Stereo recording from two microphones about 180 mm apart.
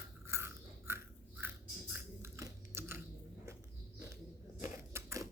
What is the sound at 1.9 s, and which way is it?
Chewing, 15° right (ahead or behind).